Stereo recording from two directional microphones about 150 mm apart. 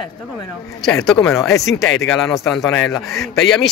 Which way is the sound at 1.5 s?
20° left (ahead or behind).